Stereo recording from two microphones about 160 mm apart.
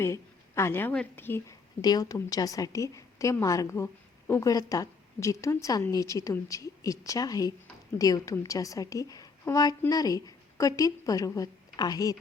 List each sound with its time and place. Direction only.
0.0 s a woman's voice: 15° left (ahead or behind)
1.8 s a woman's voice: 25° left (ahead or behind)